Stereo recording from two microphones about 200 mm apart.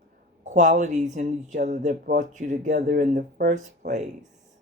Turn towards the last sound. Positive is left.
turn(degrees=-40)  # may be behind; listen again after turning